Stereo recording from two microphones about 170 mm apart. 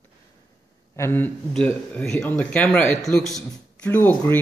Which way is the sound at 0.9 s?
15° left (ahead or behind).